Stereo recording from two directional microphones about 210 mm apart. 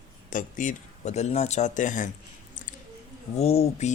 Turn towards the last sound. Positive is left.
turn(degrees=30)  # may be behind; listen again after turning